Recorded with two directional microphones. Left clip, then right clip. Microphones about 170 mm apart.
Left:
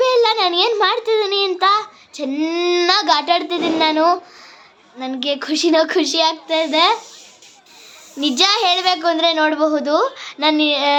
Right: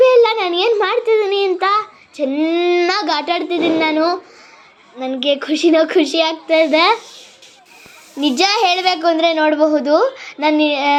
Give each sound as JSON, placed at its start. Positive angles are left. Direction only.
{"t": 0.0, "sound": "a sound", "side_deg": 0}
{"t": 4.9, "sound": "a woman's voice", "side_deg": 0}
{"t": 6.5, "sound": "a child's voice", "side_deg": -15}
{"t": 8.2, "sound": "a woman's voice", "side_deg": -5}